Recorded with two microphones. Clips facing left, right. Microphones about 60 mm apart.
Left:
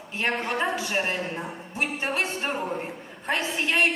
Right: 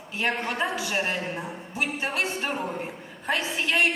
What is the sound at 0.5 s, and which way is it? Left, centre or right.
Speech, centre.